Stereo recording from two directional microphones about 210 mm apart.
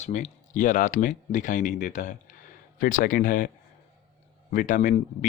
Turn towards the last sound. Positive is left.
turn(degrees=35)  # may be behind; listen again after turning